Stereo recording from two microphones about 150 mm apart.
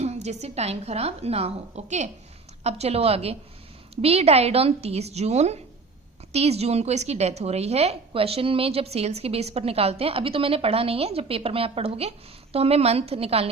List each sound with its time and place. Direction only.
0.0 s a woman's voice: 45° right (ahead or behind)